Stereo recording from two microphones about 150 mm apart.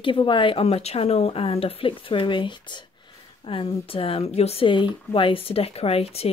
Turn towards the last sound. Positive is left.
turn(degrees=40)  # may be behind; listen again after turning